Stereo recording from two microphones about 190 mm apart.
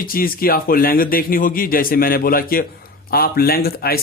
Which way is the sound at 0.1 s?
50° left (ahead or behind).